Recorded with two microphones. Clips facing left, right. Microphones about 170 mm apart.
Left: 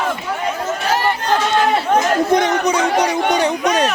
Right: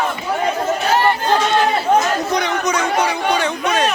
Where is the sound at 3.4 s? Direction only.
40° left (ahead or behind).